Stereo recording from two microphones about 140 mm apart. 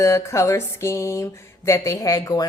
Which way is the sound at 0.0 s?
20° left (ahead or behind).